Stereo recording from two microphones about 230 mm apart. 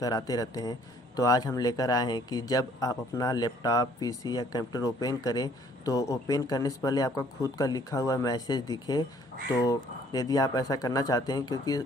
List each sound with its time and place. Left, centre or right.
0.0 s a man's voice: centre